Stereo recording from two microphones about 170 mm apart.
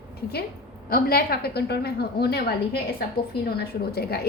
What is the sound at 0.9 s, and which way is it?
A woman's voice, 60° left (ahead or behind).